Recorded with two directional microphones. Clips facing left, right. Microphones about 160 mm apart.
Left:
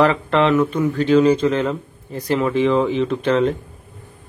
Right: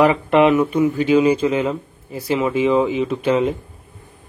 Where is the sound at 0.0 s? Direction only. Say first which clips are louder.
Right 2 dB; 15° right (ahead or behind).